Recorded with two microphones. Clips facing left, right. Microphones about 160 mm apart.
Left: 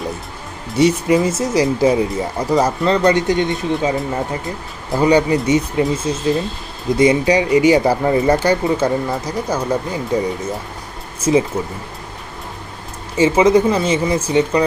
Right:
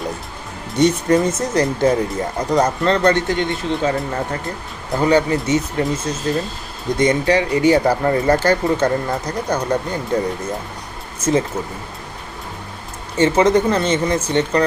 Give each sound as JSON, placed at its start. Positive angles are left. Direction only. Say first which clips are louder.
{"t": 0.8, "sound": "speech", "louder": "left 1 dB", "side_deg": 10}
{"t": 4.4, "sound": "speech", "louder": "left 1 dB", "side_deg": 0}
{"t": 5.0, "sound": "speech", "louder": "left 2 dB", "side_deg": 15}
{"t": 8.6, "sound": "speech", "louder": "left 1 dB", "side_deg": 5}
{"t": 13.1, "sound": "speech", "louder": "left 2 dB", "side_deg": 10}